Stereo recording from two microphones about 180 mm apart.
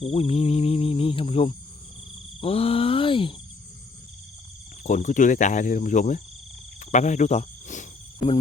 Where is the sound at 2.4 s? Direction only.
35° left (ahead or behind).